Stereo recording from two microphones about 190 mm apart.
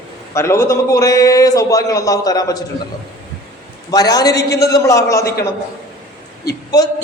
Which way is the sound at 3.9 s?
20° left (ahead or behind).